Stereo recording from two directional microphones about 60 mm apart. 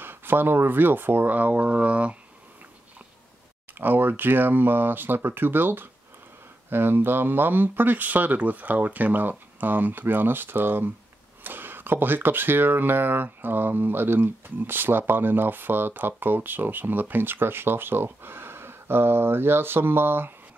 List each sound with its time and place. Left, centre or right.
0.0 s speech: right
3.7 s speech: right